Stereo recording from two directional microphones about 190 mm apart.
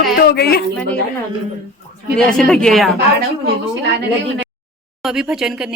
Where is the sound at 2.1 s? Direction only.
5° left (ahead or behind).